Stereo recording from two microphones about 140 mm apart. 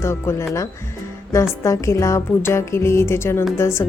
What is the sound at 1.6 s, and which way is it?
A woman's voice, 20° left (ahead or behind).